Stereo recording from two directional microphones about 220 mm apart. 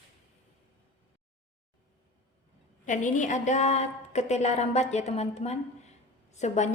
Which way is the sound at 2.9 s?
35° left (ahead or behind).